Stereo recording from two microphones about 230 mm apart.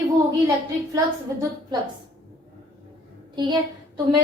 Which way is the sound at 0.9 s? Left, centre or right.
Centre.